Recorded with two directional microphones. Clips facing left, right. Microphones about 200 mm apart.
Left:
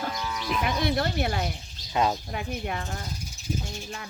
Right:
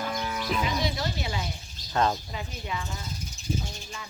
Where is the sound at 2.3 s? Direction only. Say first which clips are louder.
Left 4 dB; 60° left (ahead or behind).